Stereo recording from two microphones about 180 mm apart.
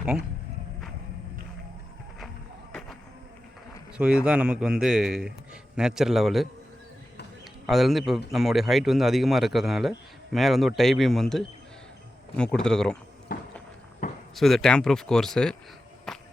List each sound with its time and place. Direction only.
3.9 s speech: 5° right (ahead or behind)
7.7 s speech: centre (ahead or behind)
13.3 s music: 55° left (ahead or behind)
14.0 s a sound: 50° left (ahead or behind)
14.3 s speech: centre (ahead or behind)
16.1 s walk: 5° left (ahead or behind)